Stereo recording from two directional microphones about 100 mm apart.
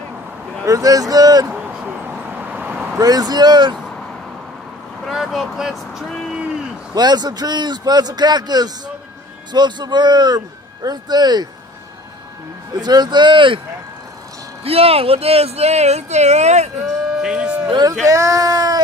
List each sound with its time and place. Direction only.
0.7 s speech: 35° right (ahead or behind)
1.5 s a sound: 15° right (ahead or behind)
3.0 s a man's voice: 40° right (ahead or behind)
5.0 s speech: centre (ahead or behind)
6.9 s a man's voice: 45° right (ahead or behind)
12.7 s a man's voice: 45° right (ahead or behind)
14.6 s speech: 75° right (ahead or behind)
16.8 s a sound: 5° right (ahead or behind)
17.6 s speech: 45° right (ahead or behind)
18.0 s speech: 35° right (ahead or behind)